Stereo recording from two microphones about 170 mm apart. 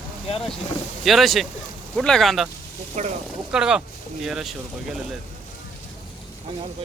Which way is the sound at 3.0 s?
45° right (ahead or behind).